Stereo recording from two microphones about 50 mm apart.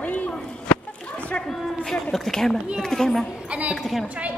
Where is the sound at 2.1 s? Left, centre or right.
Centre.